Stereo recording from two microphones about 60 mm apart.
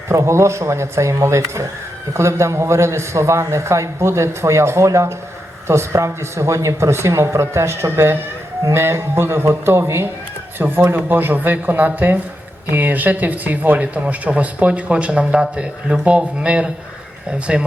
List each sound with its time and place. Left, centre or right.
0.1 s a man's voice: right
10.9 s speech: right; by 17.7 s centre